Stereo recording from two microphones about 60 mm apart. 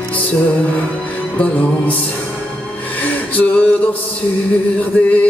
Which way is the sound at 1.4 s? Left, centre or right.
Left.